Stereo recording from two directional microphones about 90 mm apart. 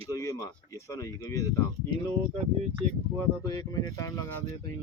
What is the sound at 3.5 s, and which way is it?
Speech, 45° left (ahead or behind).